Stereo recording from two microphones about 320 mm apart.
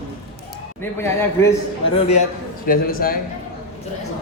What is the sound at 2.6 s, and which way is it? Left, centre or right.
Speech, left.